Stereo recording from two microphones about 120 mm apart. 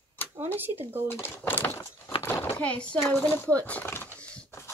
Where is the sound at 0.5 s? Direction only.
15° right (ahead or behind).